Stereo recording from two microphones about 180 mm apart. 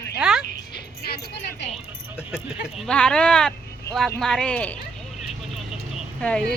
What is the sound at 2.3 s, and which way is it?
Speech, 5° right (ahead or behind).